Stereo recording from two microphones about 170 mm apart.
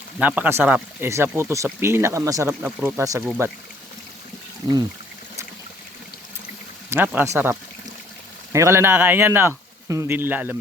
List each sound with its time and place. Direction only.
0.2 s speech: 10° right (ahead or behind)
6.9 s speech: 10° right (ahead or behind)
8.5 s speech: 15° right (ahead or behind)